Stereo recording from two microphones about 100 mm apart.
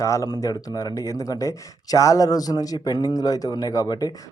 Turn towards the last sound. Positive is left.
turn(degrees=45)  # may be behind; listen again after turning